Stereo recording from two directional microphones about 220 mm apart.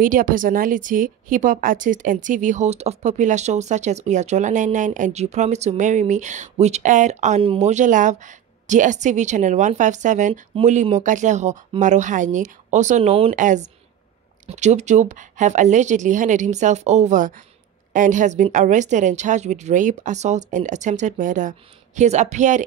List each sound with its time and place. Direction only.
0.0 s a woman's voice: 40° right (ahead or behind)